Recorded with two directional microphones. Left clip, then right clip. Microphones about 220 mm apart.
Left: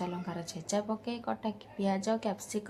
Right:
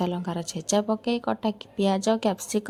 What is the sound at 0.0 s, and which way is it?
A woman's voice, 35° right (ahead or behind).